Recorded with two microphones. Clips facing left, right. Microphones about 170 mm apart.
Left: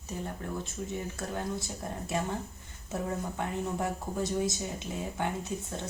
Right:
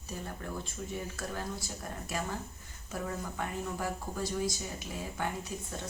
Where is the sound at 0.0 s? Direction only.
20° left (ahead or behind).